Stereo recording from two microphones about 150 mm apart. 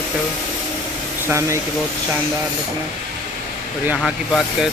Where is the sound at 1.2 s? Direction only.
20° right (ahead or behind).